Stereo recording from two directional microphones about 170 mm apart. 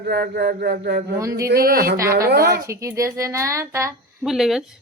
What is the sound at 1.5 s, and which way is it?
Speech, 65° right (ahead or behind).